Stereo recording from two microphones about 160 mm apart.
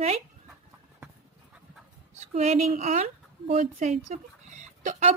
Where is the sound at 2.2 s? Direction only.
45° right (ahead or behind).